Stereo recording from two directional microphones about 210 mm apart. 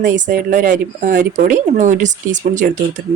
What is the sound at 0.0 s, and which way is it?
Speech, 35° right (ahead or behind).